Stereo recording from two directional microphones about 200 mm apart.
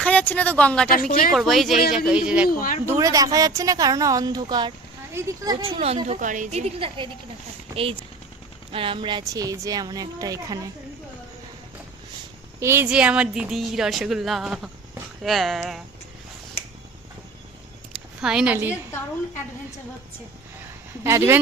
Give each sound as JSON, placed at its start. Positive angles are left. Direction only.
{"t": 0.0, "sound": "a woman's voice", "side_deg": 5}
{"t": 2.5, "sound": "speech", "side_deg": 45}
{"t": 2.8, "sound": "speech", "side_deg": -15}
{"t": 5.8, "sound": "a woman's voice", "side_deg": -30}
{"t": 6.7, "sound": "speech", "side_deg": -25}
{"t": 8.7, "sound": "speech", "side_deg": -25}
{"t": 12.5, "sound": "speech", "side_deg": -10}
{"t": 17.9, "sound": "a woman's voice", "side_deg": -5}
{"t": 21.0, "sound": "speech", "side_deg": -15}